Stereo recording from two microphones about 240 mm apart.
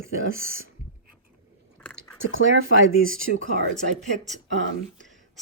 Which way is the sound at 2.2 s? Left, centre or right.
Right.